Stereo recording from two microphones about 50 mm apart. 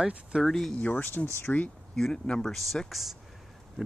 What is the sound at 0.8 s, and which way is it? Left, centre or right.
Speech, left.